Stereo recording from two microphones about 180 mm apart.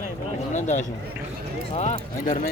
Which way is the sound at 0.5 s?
45° left (ahead or behind).